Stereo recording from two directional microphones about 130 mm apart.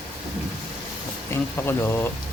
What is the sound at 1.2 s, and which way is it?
Speech, 15° left (ahead or behind).